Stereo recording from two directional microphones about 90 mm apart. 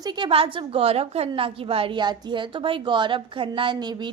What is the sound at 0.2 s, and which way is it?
A woman's voice, 85° right.